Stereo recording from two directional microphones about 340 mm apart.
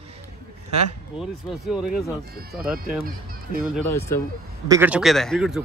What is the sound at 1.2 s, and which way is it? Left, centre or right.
A man's voice, centre.